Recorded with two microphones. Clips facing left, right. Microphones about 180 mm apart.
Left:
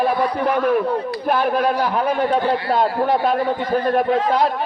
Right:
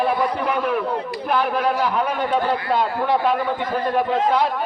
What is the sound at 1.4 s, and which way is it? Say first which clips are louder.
Speech: left 1 dB; 40° left (ahead or behind).